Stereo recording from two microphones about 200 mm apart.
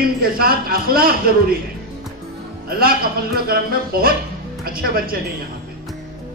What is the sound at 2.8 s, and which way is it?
A man's voice, 50° right (ahead or behind).